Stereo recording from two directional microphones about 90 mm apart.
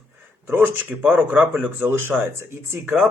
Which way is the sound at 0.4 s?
20° right (ahead or behind).